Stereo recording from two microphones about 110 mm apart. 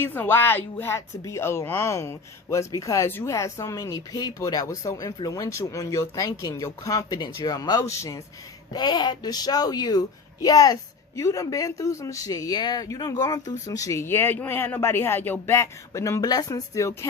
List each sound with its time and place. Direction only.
0.0 s speech: 20° left (ahead or behind)